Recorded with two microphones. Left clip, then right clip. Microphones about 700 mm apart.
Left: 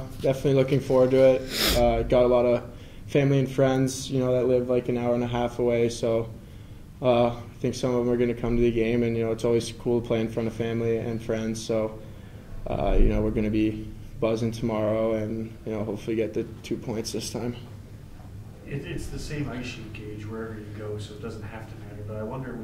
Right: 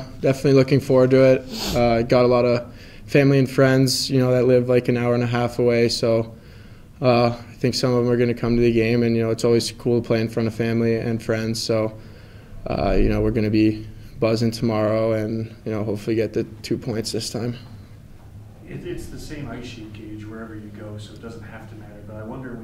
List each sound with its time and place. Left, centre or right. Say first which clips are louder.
0.2 s speech: right 5 dB; right